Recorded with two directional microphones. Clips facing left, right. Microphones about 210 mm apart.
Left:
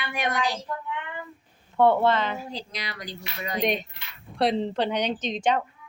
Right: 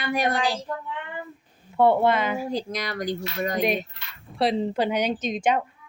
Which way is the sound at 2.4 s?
45° right (ahead or behind).